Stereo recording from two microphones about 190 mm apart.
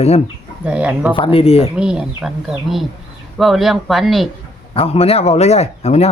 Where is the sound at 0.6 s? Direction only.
5° right (ahead or behind).